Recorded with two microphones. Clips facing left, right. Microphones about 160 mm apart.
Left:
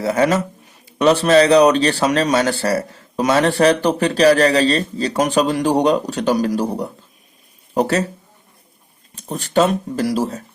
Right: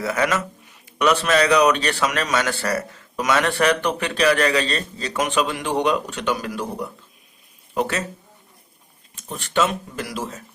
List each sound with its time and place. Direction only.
0.0 s speech: 30° left (ahead or behind)
9.1 s speech: 40° left (ahead or behind)